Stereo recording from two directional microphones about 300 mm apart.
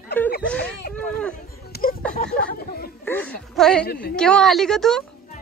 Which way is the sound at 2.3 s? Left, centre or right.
Left.